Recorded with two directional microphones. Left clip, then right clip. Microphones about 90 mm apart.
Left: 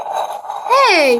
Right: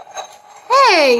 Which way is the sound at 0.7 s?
Centre (ahead or behind).